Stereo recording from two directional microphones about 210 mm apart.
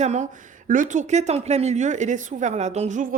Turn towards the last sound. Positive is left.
turn(degrees=-35)  # may be behind; listen again after turning